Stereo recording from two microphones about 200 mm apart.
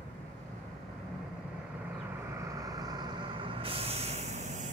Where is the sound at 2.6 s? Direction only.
20° right (ahead or behind).